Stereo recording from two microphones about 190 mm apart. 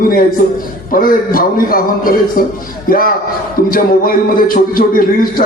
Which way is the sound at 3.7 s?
50° left (ahead or behind).